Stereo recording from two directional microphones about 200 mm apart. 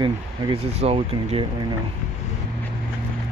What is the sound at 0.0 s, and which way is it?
Speech, 30° right (ahead or behind).